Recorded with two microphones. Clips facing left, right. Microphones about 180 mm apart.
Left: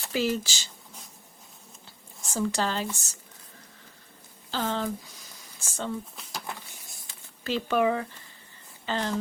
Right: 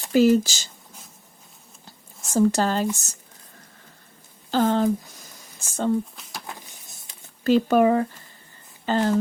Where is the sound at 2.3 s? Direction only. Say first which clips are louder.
Right 8 dB; 45° right (ahead or behind).